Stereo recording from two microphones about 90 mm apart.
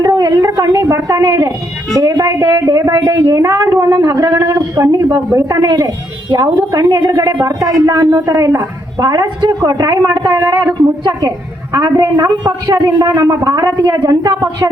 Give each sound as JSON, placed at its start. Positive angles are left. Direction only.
{"t": 0.0, "sound": "a sound", "side_deg": -45}
{"t": 2.0, "sound": "a woman's voice", "side_deg": -40}
{"t": 13.0, "sound": "a woman's voice", "side_deg": -35}